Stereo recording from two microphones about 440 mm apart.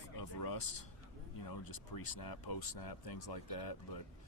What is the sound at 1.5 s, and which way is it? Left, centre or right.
Speech, left.